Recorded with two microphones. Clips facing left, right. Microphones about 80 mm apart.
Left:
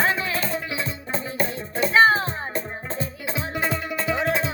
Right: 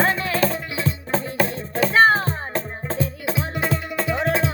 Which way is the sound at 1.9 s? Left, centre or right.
Right.